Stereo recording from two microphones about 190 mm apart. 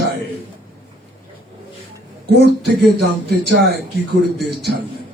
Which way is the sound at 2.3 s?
60° right (ahead or behind).